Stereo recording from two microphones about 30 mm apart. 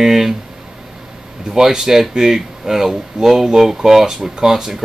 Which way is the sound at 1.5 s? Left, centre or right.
Centre.